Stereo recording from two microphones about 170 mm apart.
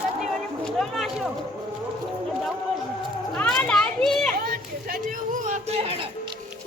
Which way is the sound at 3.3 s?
5° left (ahead or behind).